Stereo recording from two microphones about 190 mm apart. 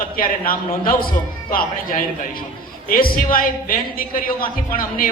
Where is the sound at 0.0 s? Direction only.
50° left (ahead or behind).